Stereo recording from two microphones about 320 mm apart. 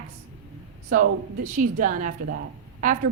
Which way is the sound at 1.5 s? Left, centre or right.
Right.